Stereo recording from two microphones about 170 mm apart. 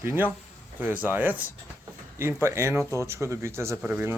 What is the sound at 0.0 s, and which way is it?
Speech, 15° right (ahead or behind).